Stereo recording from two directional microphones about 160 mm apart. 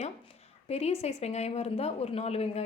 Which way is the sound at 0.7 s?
40° left (ahead or behind).